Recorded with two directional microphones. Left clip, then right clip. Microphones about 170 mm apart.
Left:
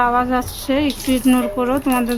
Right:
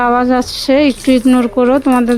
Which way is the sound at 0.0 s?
35° right (ahead or behind).